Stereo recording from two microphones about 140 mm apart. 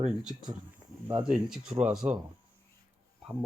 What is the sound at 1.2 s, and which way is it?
Speech, 5° right (ahead or behind).